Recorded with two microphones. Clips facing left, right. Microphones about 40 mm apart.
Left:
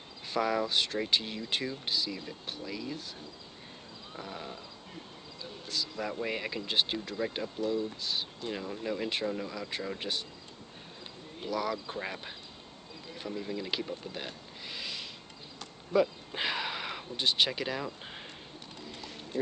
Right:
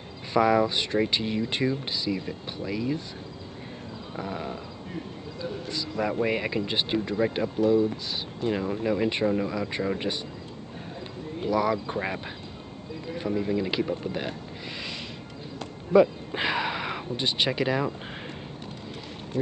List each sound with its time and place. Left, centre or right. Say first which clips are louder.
0.3 s speech: right 8 dB; centre
4.2 s speech: right 8 dB; centre
6.3 s speech: right 5 dB; centre
8.4 s speech: right 9 dB; right
11.4 s speech: right 8 dB; centre
13.3 s speech: right 8 dB; right
15.9 s speech: right 8 dB; centre